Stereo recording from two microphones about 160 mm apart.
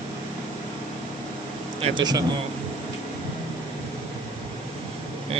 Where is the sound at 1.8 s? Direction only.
25° right (ahead or behind).